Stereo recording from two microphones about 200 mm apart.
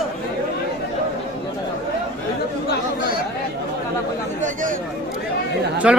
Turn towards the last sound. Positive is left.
turn(degrees=-5)  # may be behind; listen again after turning